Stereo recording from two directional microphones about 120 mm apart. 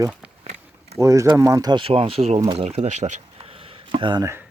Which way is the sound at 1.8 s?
50° right (ahead or behind).